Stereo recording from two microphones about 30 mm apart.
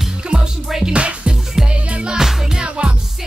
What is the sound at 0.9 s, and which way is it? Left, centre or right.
Music, right.